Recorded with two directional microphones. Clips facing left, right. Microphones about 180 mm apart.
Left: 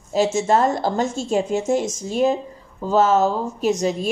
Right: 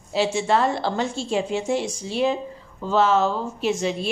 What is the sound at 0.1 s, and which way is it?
A woman's voice, 45° left (ahead or behind).